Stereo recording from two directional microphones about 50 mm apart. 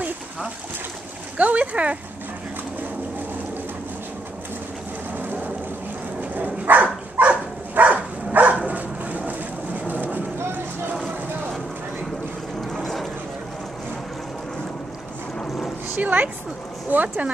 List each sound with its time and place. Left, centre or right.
1.4 s speech: right
5.1 s boat: right
6.3 s a sound: right
9.8 s vehicle: right
12.7 s vehicle: centre
16.0 s a sound: right